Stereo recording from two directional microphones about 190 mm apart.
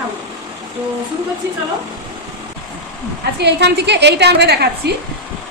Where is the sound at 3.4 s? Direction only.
60° right (ahead or behind).